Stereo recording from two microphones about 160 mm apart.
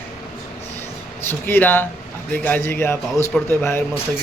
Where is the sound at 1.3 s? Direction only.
15° left (ahead or behind).